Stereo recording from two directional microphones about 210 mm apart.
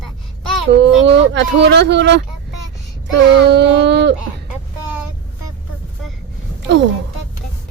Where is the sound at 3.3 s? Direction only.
55° right (ahead or behind).